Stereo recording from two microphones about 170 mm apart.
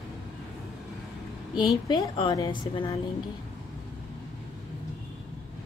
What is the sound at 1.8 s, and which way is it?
Speech, 25° left (ahead or behind).